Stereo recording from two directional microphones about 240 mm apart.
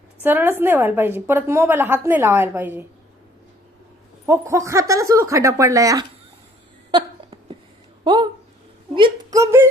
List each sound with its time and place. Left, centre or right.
0.2 s a woman's voice: centre
4.3 s a woman's voice: centre
8.0 s speech: centre
9.0 s a sound: centre